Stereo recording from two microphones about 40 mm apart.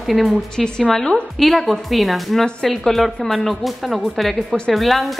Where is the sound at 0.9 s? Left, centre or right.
Centre.